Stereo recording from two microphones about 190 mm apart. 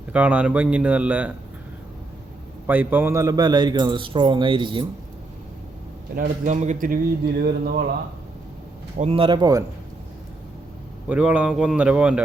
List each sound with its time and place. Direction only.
0.1 s speech: 10° right (ahead or behind)
2.6 s speech: 10° right (ahead or behind); by 4.9 s 25° right (ahead or behind)
6.1 s speech: 45° right (ahead or behind)
9.0 s speech: 30° right (ahead or behind)
11.1 s speech: 5° right (ahead or behind)